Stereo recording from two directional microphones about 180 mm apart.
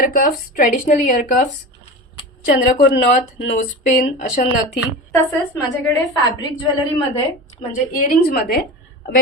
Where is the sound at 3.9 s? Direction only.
45° left (ahead or behind).